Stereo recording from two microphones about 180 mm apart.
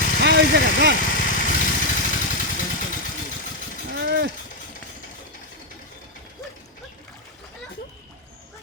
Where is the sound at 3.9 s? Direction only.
70° right (ahead or behind).